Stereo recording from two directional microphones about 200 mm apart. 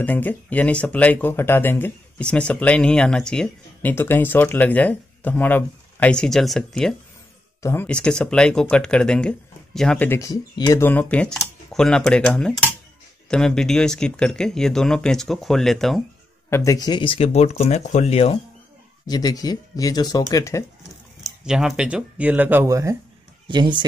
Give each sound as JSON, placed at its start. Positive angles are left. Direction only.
{"t": 0.0, "sound": "speech", "side_deg": 10}
{"t": 16.4, "sound": "speech", "side_deg": 15}
{"t": 19.0, "sound": "speech", "side_deg": 20}
{"t": 21.5, "sound": "speech", "side_deg": -5}